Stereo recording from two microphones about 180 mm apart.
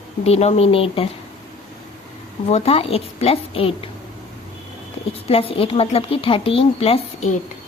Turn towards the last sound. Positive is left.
turn(degrees=35)  # may be behind; listen again after turning